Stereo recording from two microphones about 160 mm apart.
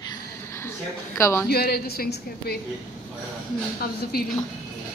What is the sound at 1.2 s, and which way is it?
Speech, 15° left (ahead or behind).